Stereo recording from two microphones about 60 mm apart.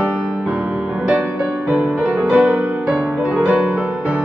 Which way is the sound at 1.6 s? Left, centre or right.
Right.